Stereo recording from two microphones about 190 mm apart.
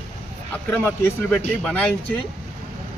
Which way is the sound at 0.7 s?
10° left (ahead or behind).